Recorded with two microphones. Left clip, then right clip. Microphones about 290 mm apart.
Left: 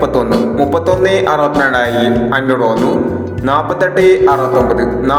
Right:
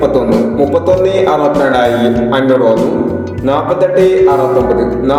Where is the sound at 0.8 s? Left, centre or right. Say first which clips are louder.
Right 1 dB; left.